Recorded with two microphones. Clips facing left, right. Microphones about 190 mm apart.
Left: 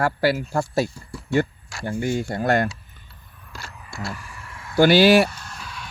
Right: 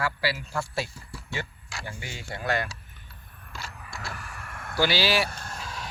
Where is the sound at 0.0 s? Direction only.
50° left (ahead or behind).